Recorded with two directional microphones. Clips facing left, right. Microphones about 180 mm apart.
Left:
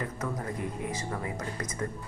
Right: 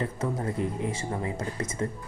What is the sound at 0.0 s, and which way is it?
Speech, 30° right (ahead or behind).